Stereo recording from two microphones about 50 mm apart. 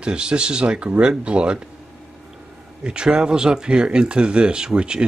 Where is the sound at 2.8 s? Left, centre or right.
Centre.